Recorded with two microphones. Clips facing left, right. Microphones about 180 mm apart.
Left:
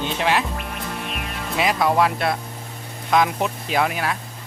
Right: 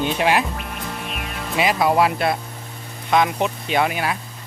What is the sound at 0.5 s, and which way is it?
Music, centre (ahead or behind).